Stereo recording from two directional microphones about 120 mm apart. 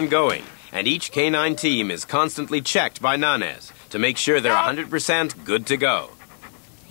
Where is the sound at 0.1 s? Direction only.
20° left (ahead or behind).